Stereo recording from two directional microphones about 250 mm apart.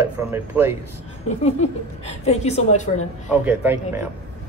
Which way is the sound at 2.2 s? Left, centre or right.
Left.